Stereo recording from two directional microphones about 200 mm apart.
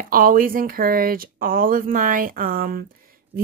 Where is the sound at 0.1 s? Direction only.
45° right (ahead or behind).